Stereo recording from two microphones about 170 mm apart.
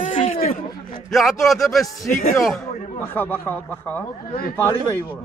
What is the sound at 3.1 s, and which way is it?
Speech, 10° left (ahead or behind).